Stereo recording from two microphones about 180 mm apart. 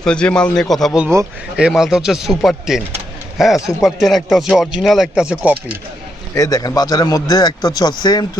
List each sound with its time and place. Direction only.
0.0 s a man's voice: 5° left (ahead or behind)
1.0 s speech: 15° right (ahead or behind)
1.5 s a man's voice: 5° right (ahead or behind)
6.3 s a man's voice: 20° left (ahead or behind)